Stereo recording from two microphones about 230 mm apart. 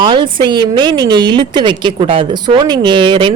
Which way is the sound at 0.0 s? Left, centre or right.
Right.